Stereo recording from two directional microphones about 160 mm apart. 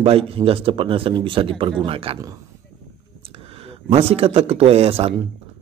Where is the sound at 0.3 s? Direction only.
35° right (ahead or behind).